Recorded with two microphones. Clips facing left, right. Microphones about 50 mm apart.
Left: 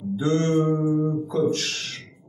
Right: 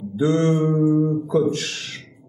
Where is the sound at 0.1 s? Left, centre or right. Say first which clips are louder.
Right 3 dB; centre.